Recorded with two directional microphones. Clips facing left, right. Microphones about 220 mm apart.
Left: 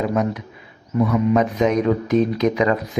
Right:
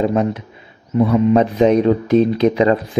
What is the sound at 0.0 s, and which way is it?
Speech, 30° right (ahead or behind).